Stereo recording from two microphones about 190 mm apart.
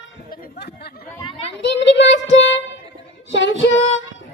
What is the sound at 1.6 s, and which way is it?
Child singing, 65° left (ahead or behind).